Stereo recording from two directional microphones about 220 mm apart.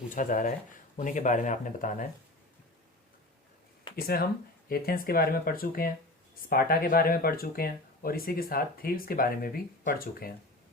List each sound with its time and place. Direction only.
0.1 s speech: 35° left (ahead or behind)
4.0 s speech: 45° left (ahead or behind)